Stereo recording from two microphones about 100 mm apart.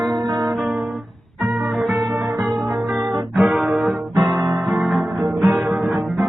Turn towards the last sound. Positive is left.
turn(degrees=0)  # may be behind; listen again after turning